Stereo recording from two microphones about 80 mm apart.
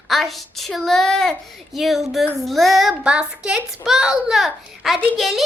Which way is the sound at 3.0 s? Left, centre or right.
Centre.